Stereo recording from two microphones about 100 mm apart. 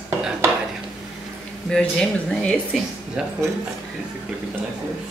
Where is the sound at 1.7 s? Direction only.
5° left (ahead or behind).